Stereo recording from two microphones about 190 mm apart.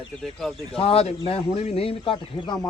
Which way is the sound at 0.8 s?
30° left (ahead or behind).